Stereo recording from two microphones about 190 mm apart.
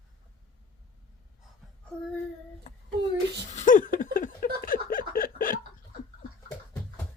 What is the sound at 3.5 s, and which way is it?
Laughter, 40° left (ahead or behind).